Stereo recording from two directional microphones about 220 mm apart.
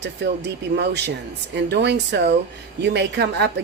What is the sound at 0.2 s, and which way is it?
Speech, 50° right (ahead or behind).